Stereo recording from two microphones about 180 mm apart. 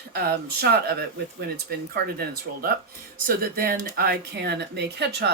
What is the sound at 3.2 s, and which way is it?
Speech, 55° right (ahead or behind).